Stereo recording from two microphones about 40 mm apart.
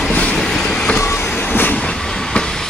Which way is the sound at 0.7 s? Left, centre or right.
Left.